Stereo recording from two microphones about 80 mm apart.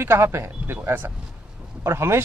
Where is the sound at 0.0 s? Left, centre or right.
Right.